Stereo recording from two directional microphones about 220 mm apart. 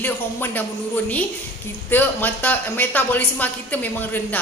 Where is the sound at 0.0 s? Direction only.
10° left (ahead or behind).